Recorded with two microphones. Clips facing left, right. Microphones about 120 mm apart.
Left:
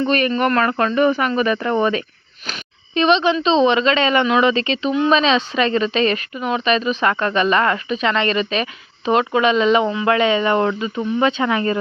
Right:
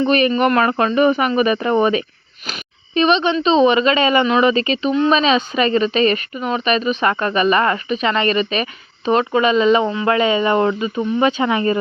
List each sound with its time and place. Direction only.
0.0 s speech: 15° right (ahead or behind)
2.5 s speech: 5° right (ahead or behind)